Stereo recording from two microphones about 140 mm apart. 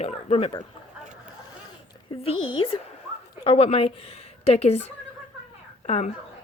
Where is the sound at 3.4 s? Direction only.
40° left (ahead or behind).